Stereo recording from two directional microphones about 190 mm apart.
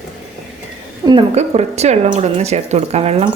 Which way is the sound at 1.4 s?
35° right (ahead or behind).